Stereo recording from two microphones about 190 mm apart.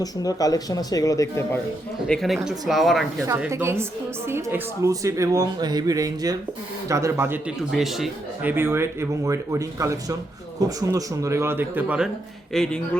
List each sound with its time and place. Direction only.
0.0 s speech: 20° left (ahead or behind)
2.0 s speech: centre (ahead or behind)
3.2 s a man's voice: 15° right (ahead or behind)
7.7 s a man's voice: centre (ahead or behind)
12.5 s speech: 5° left (ahead or behind)